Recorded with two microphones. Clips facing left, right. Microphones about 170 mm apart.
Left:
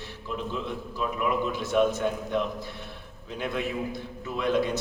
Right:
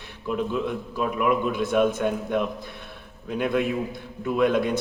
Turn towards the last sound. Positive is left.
turn(degrees=-55)  # may be behind; listen again after turning